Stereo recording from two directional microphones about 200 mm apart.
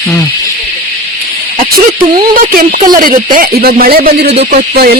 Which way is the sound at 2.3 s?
45° right (ahead or behind).